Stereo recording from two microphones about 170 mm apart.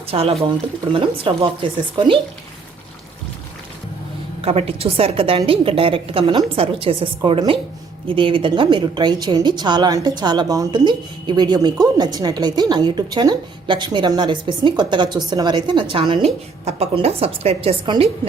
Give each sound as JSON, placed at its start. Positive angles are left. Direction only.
{"t": 0.1, "sound": "a woman's voice", "side_deg": -35}
{"t": 4.4, "sound": "a woman's voice", "side_deg": -35}